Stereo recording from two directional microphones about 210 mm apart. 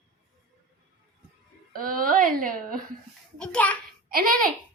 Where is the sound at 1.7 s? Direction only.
40° right (ahead or behind).